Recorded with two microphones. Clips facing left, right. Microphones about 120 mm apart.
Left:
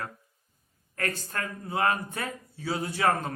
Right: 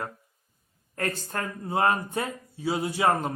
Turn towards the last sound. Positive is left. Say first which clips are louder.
# right 2 dB
turn(degrees=-20)  # may be behind; listen again after turning